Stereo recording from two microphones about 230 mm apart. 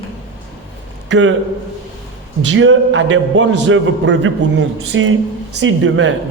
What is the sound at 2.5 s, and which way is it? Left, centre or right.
A man's voice, right.